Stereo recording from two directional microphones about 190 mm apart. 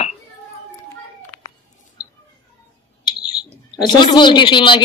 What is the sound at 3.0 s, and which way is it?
Bird, 25° left (ahead or behind).